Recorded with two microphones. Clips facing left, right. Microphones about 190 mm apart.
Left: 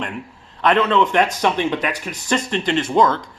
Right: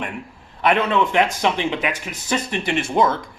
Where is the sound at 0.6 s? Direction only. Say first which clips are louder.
Left 2 dB; 10° right (ahead or behind).